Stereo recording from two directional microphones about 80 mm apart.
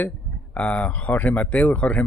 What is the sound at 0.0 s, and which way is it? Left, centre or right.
Speech, centre.